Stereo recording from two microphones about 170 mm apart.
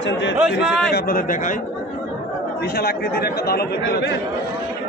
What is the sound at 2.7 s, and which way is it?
Speech, 65° left (ahead or behind).